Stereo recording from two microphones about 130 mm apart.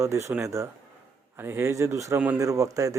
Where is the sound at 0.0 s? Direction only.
20° right (ahead or behind).